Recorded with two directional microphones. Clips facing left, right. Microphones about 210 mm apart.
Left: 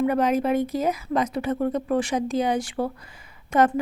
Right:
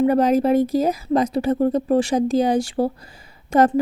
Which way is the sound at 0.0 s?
35° right (ahead or behind).